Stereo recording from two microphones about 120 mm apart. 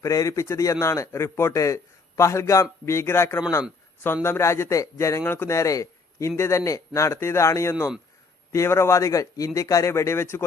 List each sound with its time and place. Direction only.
0.0 s a man's voice: 25° left (ahead or behind)